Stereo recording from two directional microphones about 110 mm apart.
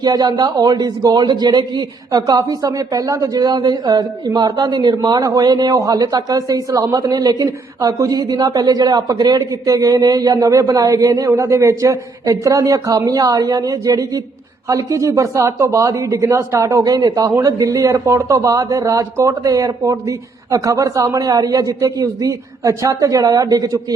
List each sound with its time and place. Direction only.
0.0 s speech: 40° right (ahead or behind)